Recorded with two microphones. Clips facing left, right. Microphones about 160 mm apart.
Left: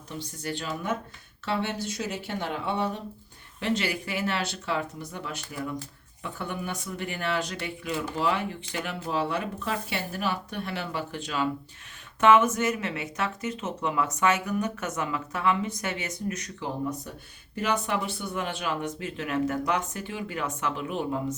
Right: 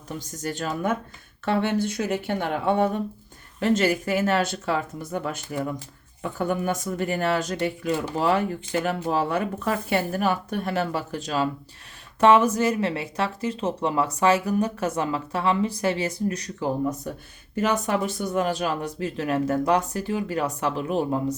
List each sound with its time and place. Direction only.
0.1 s speech: 45° right (ahead or behind)
17.5 s speech: 45° right (ahead or behind)